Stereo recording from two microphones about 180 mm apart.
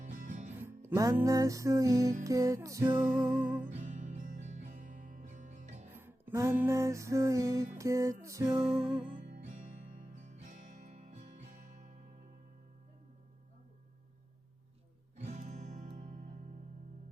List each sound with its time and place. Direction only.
0.0 s music: 45° right (ahead or behind)
0.6 s music: 10° right (ahead or behind)
3.7 s music: 45° right (ahead or behind)
5.9 s music: 10° right (ahead or behind)
9.0 s music: 35° right (ahead or behind)
15.2 s music: 40° right (ahead or behind)